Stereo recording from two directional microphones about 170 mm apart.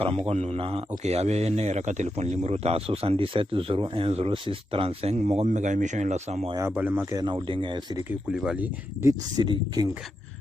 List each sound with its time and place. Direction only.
0.0 s a man's voice: 35° right (ahead or behind)
6.5 s speech: 15° right (ahead or behind); by 7.8 s 30° right (ahead or behind)
8.3 s speech: 5° right (ahead or behind)